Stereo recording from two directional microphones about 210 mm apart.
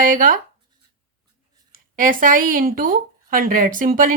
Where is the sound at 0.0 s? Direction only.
40° right (ahead or behind).